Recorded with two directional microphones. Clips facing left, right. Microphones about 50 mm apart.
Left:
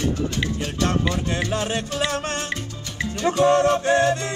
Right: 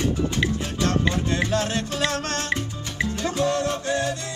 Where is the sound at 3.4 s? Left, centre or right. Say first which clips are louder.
Left 9 dB; left.